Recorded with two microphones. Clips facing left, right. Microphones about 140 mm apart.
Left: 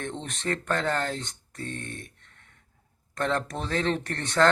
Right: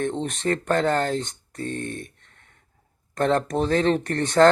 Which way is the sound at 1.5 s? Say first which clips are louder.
Right 7 dB; 45° right (ahead or behind).